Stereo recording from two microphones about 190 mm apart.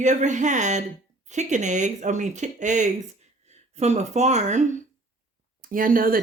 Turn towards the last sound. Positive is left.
turn(degrees=-45)  # may be behind; listen again after turning